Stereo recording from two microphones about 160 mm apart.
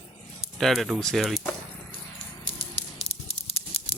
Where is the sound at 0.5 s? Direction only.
Centre (ahead or behind).